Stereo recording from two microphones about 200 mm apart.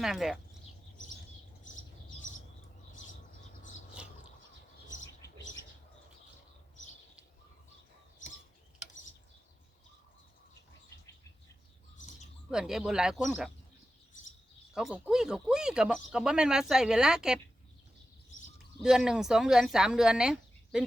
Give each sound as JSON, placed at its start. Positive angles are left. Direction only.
{"t": 0.0, "sound": "speech", "side_deg": 0}
{"t": 2.9, "sound": "bird", "side_deg": 40}
{"t": 4.0, "sound": "bird", "side_deg": -5}
{"t": 12.5, "sound": "speech", "side_deg": -5}
{"t": 14.8, "sound": "speech", "side_deg": -5}
{"t": 18.8, "sound": "speech", "side_deg": 0}